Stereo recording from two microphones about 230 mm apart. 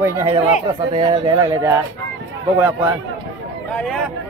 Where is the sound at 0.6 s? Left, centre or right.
Right.